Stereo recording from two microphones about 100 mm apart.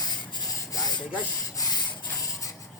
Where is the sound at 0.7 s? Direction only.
45° left (ahead or behind).